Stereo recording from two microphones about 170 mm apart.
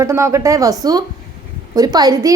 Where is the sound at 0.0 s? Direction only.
15° right (ahead or behind).